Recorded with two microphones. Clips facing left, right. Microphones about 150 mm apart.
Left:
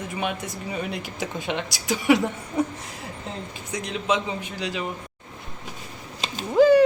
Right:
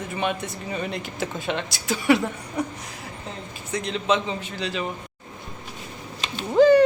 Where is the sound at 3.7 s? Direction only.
10° left (ahead or behind).